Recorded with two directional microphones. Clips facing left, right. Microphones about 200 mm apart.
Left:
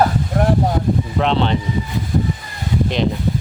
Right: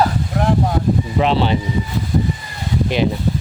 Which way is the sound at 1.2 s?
5° right (ahead or behind).